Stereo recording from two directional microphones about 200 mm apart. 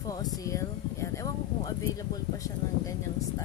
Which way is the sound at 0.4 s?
15° left (ahead or behind).